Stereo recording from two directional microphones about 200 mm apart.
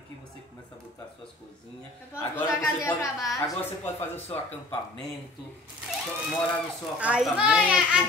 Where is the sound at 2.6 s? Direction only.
15° left (ahead or behind).